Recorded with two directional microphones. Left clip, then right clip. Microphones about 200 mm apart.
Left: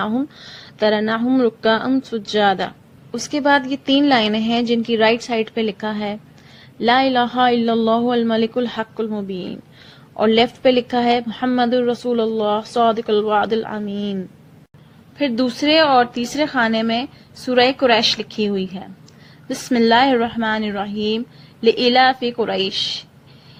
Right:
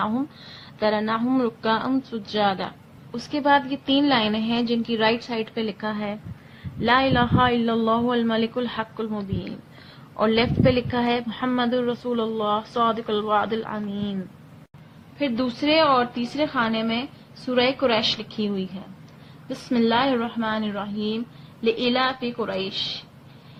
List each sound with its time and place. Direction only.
0.0 s a woman's voice: 35° left (ahead or behind)
15.2 s a woman's voice: 40° left (ahead or behind)